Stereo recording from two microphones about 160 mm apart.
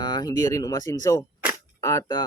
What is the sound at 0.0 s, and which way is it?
A man's voice, 25° left (ahead or behind).